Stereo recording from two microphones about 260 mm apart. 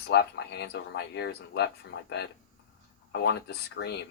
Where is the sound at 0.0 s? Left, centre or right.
Left.